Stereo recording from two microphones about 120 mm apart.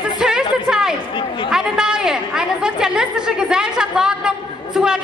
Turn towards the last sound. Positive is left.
turn(degrees=-5)  # may be behind; listen again after turning